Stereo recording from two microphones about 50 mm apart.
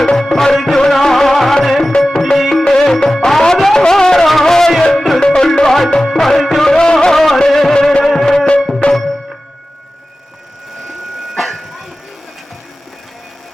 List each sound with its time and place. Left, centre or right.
0.0 s music: centre
5.2 s music: centre
6.7 s music: centre
8.8 s music: left
11.3 s music: centre